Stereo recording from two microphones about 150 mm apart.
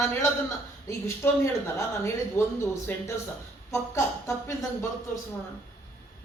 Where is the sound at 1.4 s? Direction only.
20° left (ahead or behind).